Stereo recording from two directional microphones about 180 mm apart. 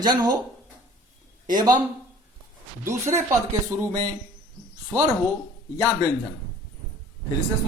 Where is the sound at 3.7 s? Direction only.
15° right (ahead or behind).